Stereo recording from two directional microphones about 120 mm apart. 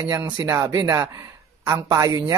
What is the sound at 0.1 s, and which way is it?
Speech, 25° right (ahead or behind).